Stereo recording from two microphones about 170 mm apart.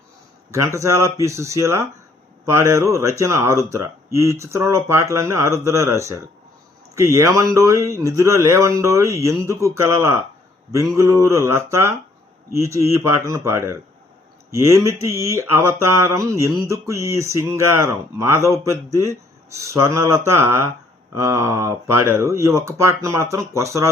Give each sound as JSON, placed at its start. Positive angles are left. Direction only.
{"t": 0.5, "sound": "speech", "side_deg": -15}